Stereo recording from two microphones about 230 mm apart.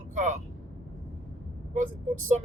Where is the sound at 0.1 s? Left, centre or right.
Right.